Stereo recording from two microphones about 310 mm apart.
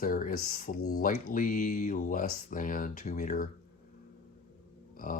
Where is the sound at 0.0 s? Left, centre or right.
Left.